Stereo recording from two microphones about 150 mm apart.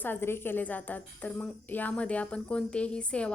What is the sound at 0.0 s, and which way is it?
A woman's voice, 15° left (ahead or behind).